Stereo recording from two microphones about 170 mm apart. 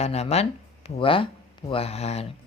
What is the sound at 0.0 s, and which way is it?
Speech, 40° left (ahead or behind).